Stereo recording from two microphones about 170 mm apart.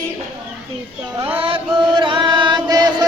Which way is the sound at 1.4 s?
30° right (ahead or behind).